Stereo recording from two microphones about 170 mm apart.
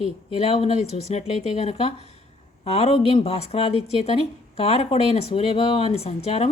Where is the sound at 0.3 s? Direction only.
35° left (ahead or behind).